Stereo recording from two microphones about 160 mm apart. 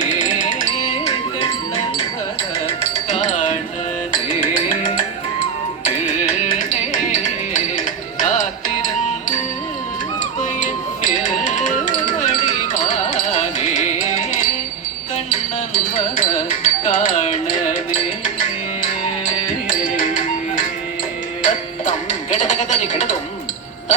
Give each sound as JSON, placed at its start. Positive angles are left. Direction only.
{"t": 0.0, "sound": "music", "side_deg": 50}
{"t": 6.1, "sound": "music", "side_deg": 55}
{"t": 10.6, "sound": "music", "side_deg": 50}
{"t": 12.7, "sound": "music", "side_deg": 50}
{"t": 19.8, "sound": "music", "side_deg": 60}
{"t": 21.4, "sound": "music", "side_deg": 50}